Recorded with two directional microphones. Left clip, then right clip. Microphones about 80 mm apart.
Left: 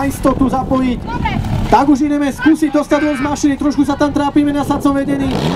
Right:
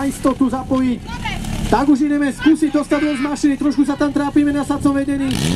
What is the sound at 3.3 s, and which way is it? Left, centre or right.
Speech, centre.